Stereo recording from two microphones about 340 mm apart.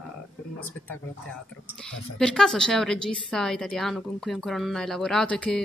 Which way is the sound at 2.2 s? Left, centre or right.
Centre.